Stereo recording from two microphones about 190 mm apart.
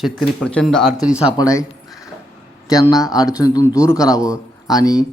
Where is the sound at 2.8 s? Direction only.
Centre (ahead or behind).